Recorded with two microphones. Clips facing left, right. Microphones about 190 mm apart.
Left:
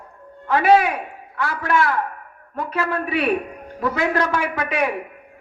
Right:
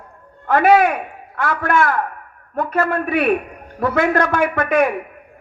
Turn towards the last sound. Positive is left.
turn(degrees=-50)  # may be behind; listen again after turning